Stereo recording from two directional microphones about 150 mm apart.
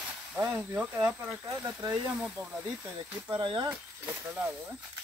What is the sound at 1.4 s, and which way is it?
Speech, 20° right (ahead or behind).